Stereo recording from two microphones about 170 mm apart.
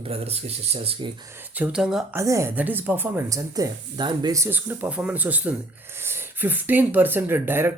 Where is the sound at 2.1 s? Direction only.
15° right (ahead or behind).